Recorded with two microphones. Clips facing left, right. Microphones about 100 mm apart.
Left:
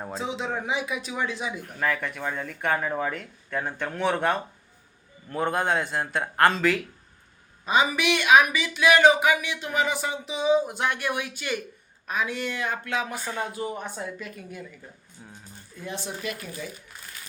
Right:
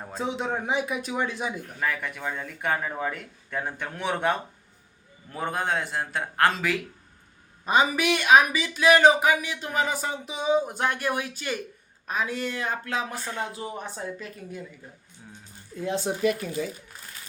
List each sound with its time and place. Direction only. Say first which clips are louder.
0.2 s a man's voice: right 3 dB; 50° right (ahead or behind)
1.8 s a man's voice: left 2 dB; 10° right (ahead or behind)
5.3 s a man's voice: left 3 dB; centre (ahead or behind)
7.6 s speech: right 1 dB; 45° right (ahead or behind)
13.1 s a man's voice: left 1 dB; centre (ahead or behind)
13.5 s speech: left 3 dB; 30° right (ahead or behind)